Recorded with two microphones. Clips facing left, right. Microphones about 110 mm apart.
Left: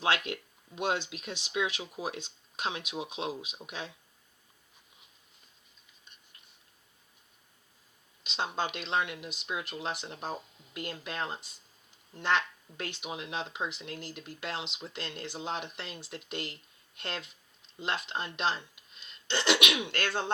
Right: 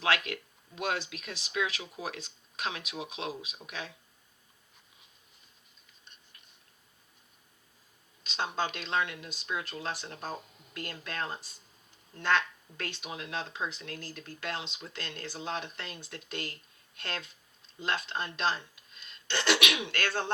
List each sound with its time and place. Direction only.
0.0 s speech: 25° left (ahead or behind)
8.2 s speech: 20° left (ahead or behind)